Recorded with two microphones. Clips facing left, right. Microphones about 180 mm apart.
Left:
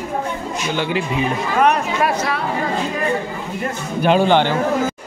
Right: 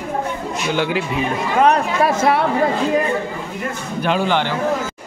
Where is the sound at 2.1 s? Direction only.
55° right (ahead or behind).